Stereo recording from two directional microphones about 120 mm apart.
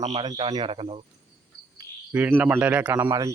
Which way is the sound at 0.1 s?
40° right (ahead or behind).